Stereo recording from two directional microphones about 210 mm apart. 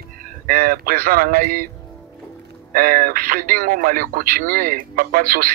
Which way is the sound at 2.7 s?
40° right (ahead or behind).